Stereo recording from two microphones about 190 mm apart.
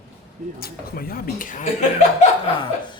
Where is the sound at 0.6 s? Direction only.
50° left (ahead or behind).